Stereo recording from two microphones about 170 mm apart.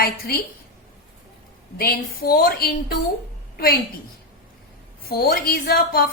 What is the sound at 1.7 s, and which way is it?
A woman's voice, 60° left (ahead or behind).